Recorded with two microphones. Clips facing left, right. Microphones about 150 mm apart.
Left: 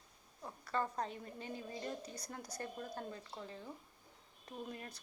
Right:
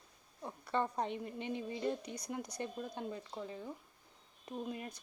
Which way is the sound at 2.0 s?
30° left (ahead or behind).